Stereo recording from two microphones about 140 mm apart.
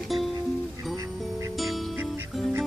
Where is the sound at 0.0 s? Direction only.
Centre (ahead or behind).